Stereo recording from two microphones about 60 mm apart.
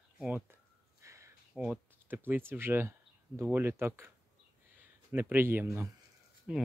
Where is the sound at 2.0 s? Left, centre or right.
Right.